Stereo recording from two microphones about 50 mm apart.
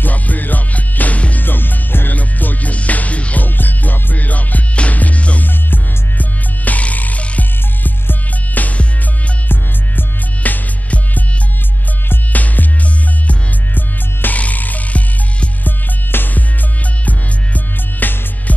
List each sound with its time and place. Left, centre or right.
0.0 s music: left
1.4 s music: left
2.1 s music: left
3.4 s music: left
5.5 s music: left
16.1 s music: left
18.0 s music: left